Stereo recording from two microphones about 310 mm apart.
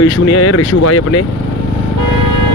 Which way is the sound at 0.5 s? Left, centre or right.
Left.